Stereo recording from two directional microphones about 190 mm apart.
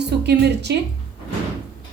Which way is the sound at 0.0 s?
60° right (ahead or behind).